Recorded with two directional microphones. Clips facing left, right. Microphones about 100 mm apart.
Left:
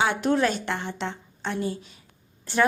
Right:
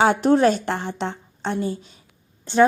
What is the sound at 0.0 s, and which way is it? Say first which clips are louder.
A woman's voice: right 6 dB; 40° right (ahead or behind).